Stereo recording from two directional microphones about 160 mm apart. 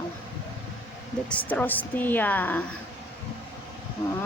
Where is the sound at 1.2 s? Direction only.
10° left (ahead or behind).